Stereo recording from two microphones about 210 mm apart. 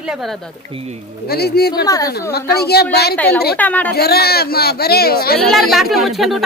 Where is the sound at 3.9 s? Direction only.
50° left (ahead or behind).